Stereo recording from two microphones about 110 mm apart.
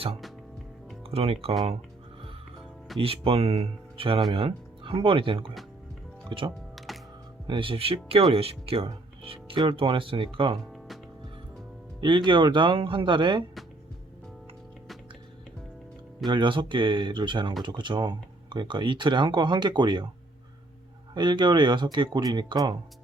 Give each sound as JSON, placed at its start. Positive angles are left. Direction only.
{"t": 1.1, "sound": "speech", "side_deg": -65}
{"t": 3.0, "sound": "speech", "side_deg": -60}
{"t": 6.7, "sound": "music", "side_deg": 0}
{"t": 7.4, "sound": "speech", "side_deg": -45}
{"t": 11.9, "sound": "speech", "side_deg": -45}
{"t": 16.2, "sound": "speech", "side_deg": -45}
{"t": 21.2, "sound": "speech", "side_deg": -40}